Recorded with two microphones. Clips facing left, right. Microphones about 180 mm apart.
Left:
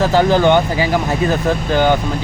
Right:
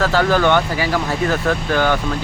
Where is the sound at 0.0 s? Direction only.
20° left (ahead or behind).